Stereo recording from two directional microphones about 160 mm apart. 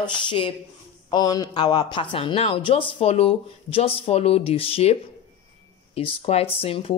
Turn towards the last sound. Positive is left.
turn(degrees=35)  # may be behind; listen again after turning